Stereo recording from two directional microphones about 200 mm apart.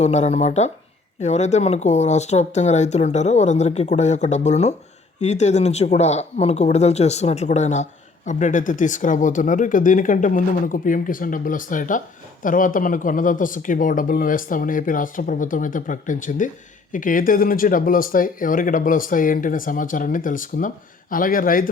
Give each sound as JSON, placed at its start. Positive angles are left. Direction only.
{"t": 0.0, "sound": "speech", "side_deg": 35}